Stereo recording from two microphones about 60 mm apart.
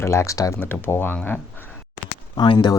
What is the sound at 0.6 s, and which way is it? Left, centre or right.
Speech, left.